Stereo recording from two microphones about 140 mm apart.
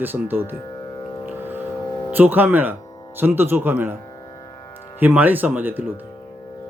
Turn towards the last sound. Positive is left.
turn(degrees=-15)  # may be behind; listen again after turning